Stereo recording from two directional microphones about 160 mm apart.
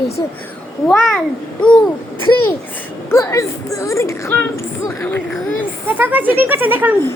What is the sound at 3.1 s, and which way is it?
A woman's voice, 20° left (ahead or behind).